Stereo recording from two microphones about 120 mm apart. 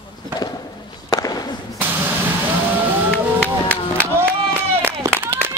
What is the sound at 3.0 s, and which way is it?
Run, 10° left (ahead or behind).